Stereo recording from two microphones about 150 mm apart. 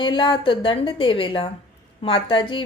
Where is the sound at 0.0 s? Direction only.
30° left (ahead or behind).